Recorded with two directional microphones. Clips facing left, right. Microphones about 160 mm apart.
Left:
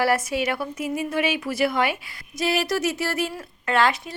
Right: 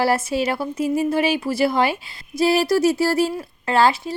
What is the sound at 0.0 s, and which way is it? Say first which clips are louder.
A woman's voice: right 2 dB; 30° right (ahead or behind).